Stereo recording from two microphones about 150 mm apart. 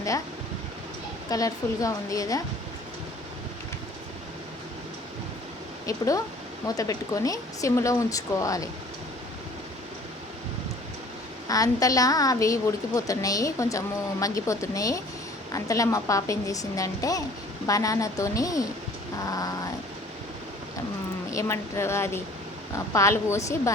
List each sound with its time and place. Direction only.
1.3 s speech: 25° left (ahead or behind)
5.8 s speech: 20° left (ahead or behind)
11.4 s speech: 25° left (ahead or behind)
21.3 s speech: 20° left (ahead or behind)